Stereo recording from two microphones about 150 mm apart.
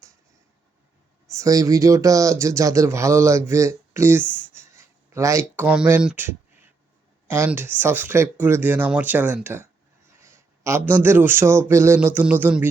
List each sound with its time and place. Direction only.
1.3 s speech: 20° right (ahead or behind)
4.2 s speech: 10° left (ahead or behind)
4.8 s a man's voice: 20° right (ahead or behind)